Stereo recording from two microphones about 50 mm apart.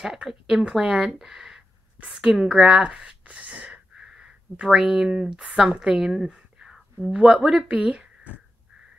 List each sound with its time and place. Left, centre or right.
0.3 s speech: centre
1.1 s speech: centre
3.3 s a sound: right
3.9 s wheeze: centre
4.6 s speech: centre
7.8 s a sound: right